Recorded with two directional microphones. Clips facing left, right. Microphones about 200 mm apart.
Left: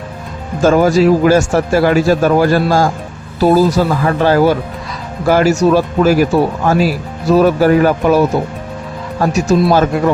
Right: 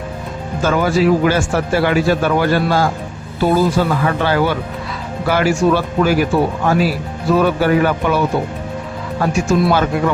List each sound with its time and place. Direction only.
0.6 s a man's voice: 40° left (ahead or behind)